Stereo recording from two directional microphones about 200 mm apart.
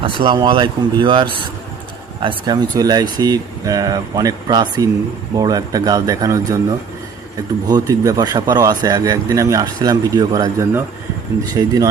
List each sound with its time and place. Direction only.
0.0 s speech: 25° right (ahead or behind)
7.7 s speech: 20° right (ahead or behind)